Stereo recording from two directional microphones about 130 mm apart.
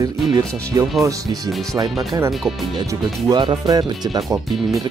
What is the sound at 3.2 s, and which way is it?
Speech, 35° right (ahead or behind).